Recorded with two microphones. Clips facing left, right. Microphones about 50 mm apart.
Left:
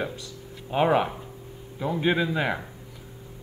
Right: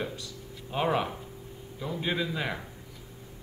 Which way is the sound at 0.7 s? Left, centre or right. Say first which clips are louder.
Left 6 dB; left.